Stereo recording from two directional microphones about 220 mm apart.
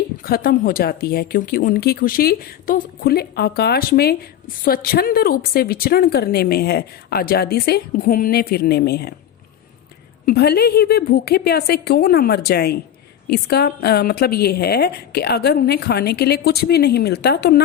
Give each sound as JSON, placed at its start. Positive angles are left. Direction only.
{"t": 0.2, "sound": "speech", "side_deg": 45}
{"t": 10.2, "sound": "speech", "side_deg": 45}